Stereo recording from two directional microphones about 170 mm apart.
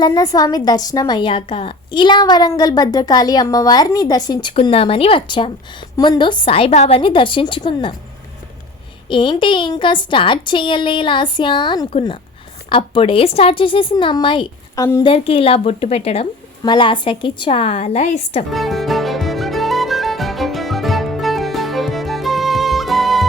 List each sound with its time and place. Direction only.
0.0 s a woman's voice: 20° left (ahead or behind)
9.0 s a woman's voice: 30° left (ahead or behind)
16.6 s speech: 25° left (ahead or behind)
18.5 s music: centre (ahead or behind)